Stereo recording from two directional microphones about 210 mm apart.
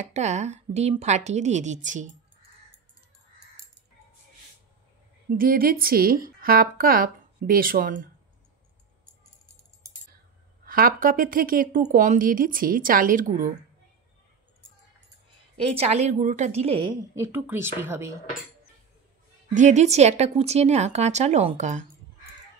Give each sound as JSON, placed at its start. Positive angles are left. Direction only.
{"t": 0.0, "sound": "a woman's voice", "side_deg": -35}
{"t": 5.4, "sound": "a woman's voice", "side_deg": -45}
{"t": 10.6, "sound": "a woman's voice", "side_deg": -45}
{"t": 15.7, "sound": "a woman's voice", "side_deg": -30}
{"t": 17.1, "sound": "speech", "side_deg": -10}
{"t": 19.5, "sound": "a woman's voice", "side_deg": -35}